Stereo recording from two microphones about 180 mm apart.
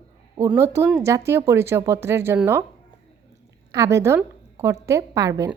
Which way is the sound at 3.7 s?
20° right (ahead or behind).